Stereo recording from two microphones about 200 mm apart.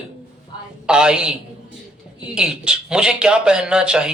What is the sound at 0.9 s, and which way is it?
Speech, 5° right (ahead or behind).